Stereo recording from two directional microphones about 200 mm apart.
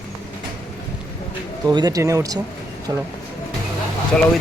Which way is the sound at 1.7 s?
20° right (ahead or behind).